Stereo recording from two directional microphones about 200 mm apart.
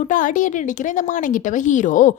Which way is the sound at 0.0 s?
40° left (ahead or behind).